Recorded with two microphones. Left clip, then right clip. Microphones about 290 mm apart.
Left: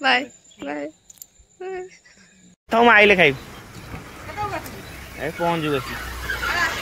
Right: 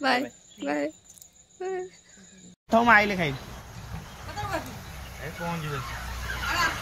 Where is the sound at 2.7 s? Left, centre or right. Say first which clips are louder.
Left 7 dB; left.